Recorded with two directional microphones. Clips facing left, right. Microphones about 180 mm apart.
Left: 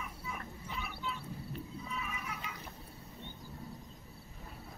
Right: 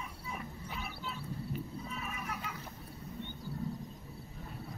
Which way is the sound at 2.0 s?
50° right (ahead or behind).